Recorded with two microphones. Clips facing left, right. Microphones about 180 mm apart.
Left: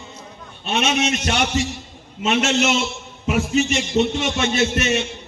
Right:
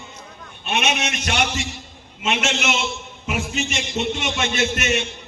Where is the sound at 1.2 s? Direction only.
35° left (ahead or behind).